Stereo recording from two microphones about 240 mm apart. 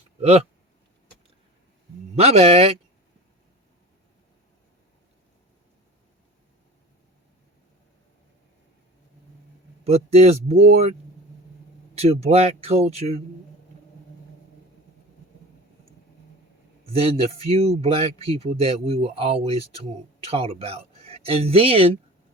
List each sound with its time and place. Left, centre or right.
0.2 s speech: right
2.1 s speech: right
9.8 s speech: right
11.9 s speech: right
16.8 s speech: right